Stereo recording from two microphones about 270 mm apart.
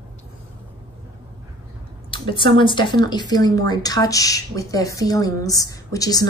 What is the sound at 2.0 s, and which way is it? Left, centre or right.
Speech, centre.